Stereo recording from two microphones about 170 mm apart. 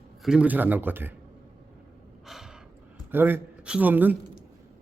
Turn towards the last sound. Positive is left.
turn(degrees=-10)  # may be behind; listen again after turning